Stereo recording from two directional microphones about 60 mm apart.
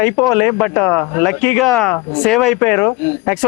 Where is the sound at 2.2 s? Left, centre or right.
Centre.